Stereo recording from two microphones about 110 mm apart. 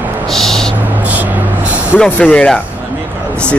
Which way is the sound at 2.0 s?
10° left (ahead or behind).